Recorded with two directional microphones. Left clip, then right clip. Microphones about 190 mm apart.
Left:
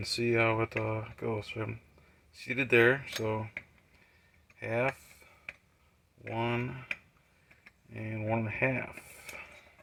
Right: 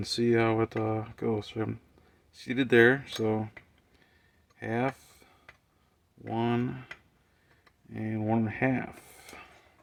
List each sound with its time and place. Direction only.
0.0 s speech: 65° right (ahead or behind)
4.6 s a sound: 65° right (ahead or behind)
6.3 s speech: 70° right (ahead or behind)
7.9 s speech: 65° right (ahead or behind)